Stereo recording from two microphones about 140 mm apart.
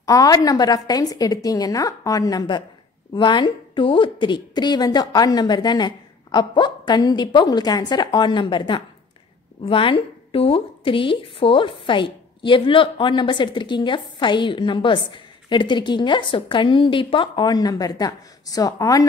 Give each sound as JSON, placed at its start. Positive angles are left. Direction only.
{"t": 0.0, "sound": "a woman's voice", "side_deg": 25}